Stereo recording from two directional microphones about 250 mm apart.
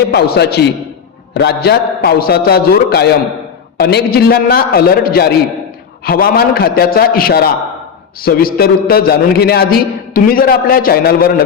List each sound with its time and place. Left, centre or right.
0.1 s a man's voice: left